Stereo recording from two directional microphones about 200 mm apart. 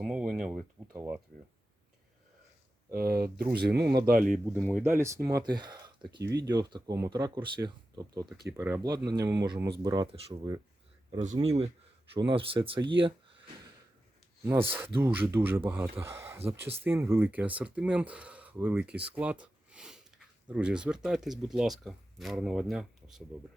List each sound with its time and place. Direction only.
0.0 s a sound: 5° right (ahead or behind)
2.9 s speech: 50° right (ahead or behind)
4.4 s speech: 10° right (ahead or behind)
11.1 s speech: 35° right (ahead or behind)
14.9 s speech: 10° right (ahead or behind)